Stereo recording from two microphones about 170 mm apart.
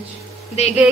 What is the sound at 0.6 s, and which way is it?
Speech, 40° left (ahead or behind).